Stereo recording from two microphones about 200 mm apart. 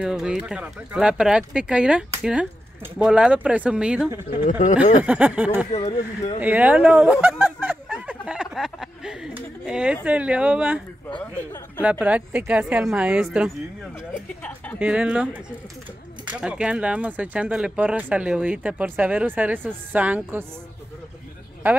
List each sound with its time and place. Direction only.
0.0 s speech: 5° right (ahead or behind)
4.5 s speech: 40° left (ahead or behind)
5.0 s speech: 5° right (ahead or behind)
6.4 s a sound: 10° right (ahead or behind)
10.0 s speech: 5° right (ahead or behind)
11.8 s speech: 5° right (ahead or behind)
14.8 s speech: 5° right (ahead or behind)
16.3 s speech: 5° right (ahead or behind)